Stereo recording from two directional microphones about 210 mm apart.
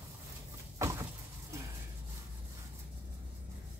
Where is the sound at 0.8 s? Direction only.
15° right (ahead or behind).